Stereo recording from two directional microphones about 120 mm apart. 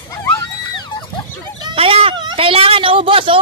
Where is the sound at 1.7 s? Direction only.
50° right (ahead or behind).